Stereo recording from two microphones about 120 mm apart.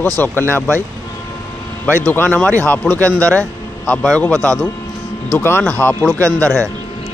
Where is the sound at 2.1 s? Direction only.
15° left (ahead or behind).